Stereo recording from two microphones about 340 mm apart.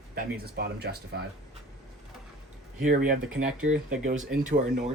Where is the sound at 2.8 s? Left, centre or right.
Right.